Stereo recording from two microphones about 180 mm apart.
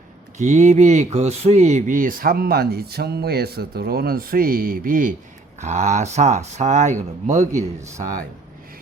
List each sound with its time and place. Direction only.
0.3 s speech: 40° right (ahead or behind)